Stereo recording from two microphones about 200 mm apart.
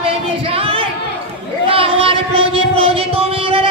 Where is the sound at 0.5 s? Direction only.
30° right (ahead or behind).